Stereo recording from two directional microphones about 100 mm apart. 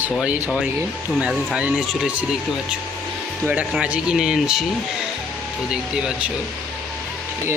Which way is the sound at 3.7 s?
10° right (ahead or behind).